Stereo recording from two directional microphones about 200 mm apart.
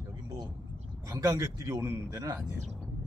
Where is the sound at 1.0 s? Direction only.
15° right (ahead or behind).